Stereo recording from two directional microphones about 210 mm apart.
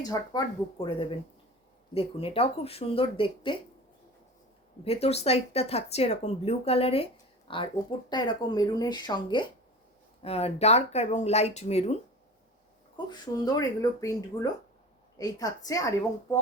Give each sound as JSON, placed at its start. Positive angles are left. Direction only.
{"t": 0.0, "sound": "speech", "side_deg": 20}
{"t": 4.8, "sound": "speech", "side_deg": 30}
{"t": 13.1, "sound": "speech", "side_deg": 20}
{"t": 15.2, "sound": "speech", "side_deg": 15}